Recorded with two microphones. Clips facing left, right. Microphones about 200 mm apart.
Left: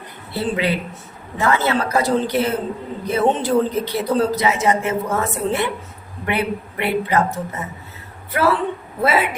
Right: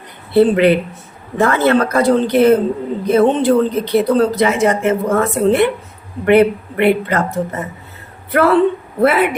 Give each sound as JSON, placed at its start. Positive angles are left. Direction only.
{"t": 0.3, "sound": "a woman's voice", "side_deg": -60}